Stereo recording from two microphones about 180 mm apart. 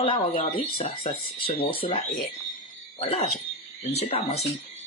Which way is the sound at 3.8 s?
35° left (ahead or behind).